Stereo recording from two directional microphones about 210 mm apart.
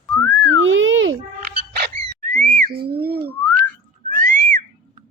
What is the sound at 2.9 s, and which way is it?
Whistling, 45° right (ahead or behind).